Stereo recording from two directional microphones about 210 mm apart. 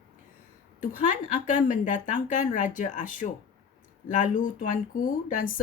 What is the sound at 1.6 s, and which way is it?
Speech, 35° left (ahead or behind).